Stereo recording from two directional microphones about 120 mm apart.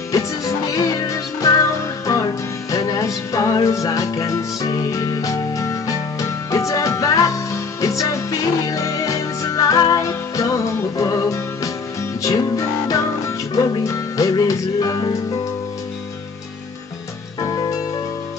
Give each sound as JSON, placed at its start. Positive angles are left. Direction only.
{"t": 0.7, "sound": "music", "side_deg": 25}
{"t": 17.4, "sound": "music", "side_deg": 30}